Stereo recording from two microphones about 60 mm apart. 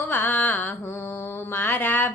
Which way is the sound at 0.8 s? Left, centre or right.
Left.